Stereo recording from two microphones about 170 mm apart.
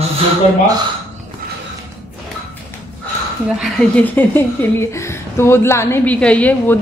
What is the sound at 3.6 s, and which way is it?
A woman's voice, 5° left (ahead or behind).